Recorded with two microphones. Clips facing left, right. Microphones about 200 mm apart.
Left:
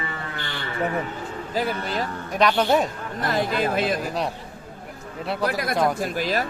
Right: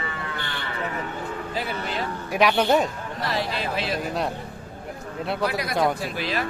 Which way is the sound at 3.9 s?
Centre (ahead or behind).